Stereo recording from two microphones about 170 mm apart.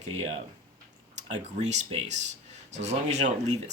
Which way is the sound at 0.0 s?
40° right (ahead or behind).